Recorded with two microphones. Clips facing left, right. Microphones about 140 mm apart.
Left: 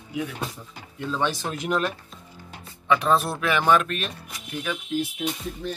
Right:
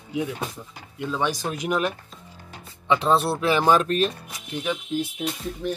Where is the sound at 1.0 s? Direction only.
15° right (ahead or behind).